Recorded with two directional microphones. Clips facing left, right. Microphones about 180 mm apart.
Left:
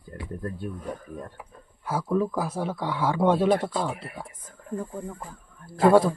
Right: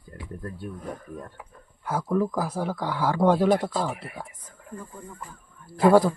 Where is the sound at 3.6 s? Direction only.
5° right (ahead or behind).